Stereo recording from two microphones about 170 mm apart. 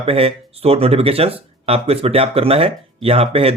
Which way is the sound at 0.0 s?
35° right (ahead or behind).